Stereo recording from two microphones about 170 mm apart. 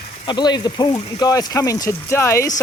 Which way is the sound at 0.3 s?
25° left (ahead or behind).